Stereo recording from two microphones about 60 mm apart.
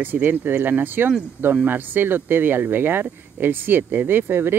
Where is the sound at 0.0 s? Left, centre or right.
Right.